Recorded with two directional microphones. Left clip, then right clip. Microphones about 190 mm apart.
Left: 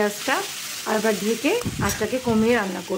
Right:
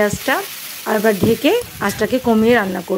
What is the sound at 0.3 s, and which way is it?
Frying, 30° right (ahead or behind).